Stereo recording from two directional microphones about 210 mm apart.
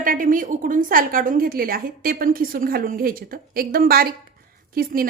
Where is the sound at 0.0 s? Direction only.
40° right (ahead or behind).